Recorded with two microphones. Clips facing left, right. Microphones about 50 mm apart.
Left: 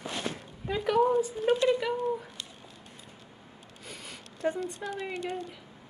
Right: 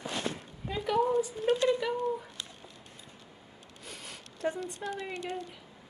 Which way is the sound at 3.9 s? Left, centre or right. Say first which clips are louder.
Left 1 dB; centre.